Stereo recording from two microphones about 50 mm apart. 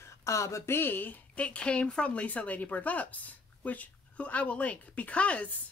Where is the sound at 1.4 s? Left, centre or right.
Left.